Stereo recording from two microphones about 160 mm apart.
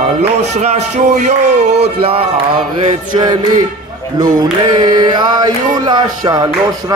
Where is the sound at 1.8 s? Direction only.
35° right (ahead or behind).